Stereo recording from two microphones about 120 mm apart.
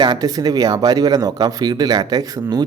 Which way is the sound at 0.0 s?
35° right (ahead or behind).